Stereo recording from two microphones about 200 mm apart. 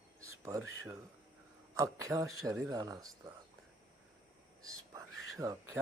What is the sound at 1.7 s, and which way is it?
Speech, 15° right (ahead or behind).